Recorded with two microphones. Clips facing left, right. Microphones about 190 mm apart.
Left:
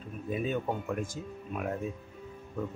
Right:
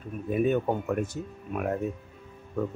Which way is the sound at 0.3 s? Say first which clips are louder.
Right 7 dB; 60° right (ahead or behind).